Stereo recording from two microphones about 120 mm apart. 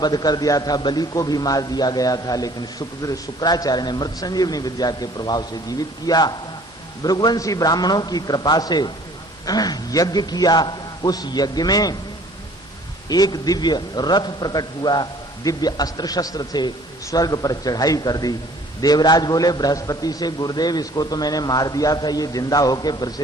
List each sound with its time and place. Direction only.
0.0 s a man's voice: 35° left (ahead or behind)
13.1 s a man's voice: 35° left (ahead or behind)